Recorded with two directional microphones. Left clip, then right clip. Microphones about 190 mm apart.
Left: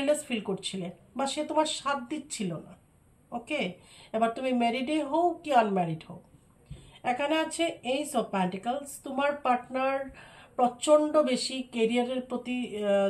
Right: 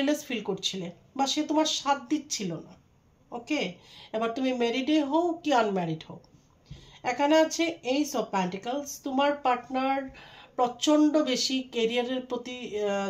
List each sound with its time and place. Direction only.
0.0 s speech: 35° right (ahead or behind)